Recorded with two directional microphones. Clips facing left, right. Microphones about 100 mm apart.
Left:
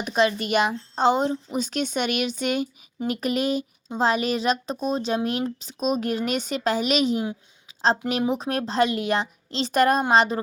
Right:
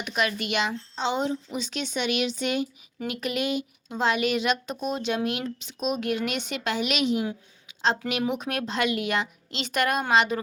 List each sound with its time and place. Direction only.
0.0 s speech: 30° left (ahead or behind)
0.4 s a woman's voice: 45° left (ahead or behind)